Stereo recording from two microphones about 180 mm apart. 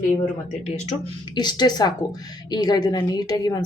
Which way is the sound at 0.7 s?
40° left (ahead or behind).